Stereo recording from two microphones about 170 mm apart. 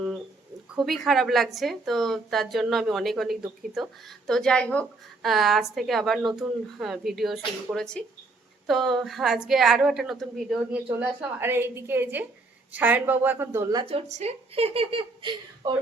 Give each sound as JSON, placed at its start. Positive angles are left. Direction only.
{"t": 0.8, "sound": "speech", "side_deg": 0}
{"t": 11.0, "sound": "a woman's voice", "side_deg": -15}
{"t": 13.8, "sound": "speech", "side_deg": -35}